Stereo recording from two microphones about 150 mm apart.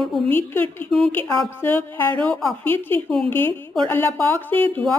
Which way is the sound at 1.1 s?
15° left (ahead or behind).